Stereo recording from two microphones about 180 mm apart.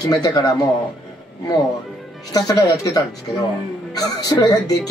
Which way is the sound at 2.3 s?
20° left (ahead or behind).